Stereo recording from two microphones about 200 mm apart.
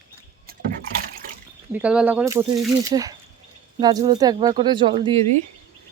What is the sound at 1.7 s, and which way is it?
Speech, 5° right (ahead or behind).